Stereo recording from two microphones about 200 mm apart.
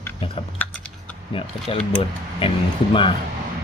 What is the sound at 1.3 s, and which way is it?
Speech, 30° left (ahead or behind).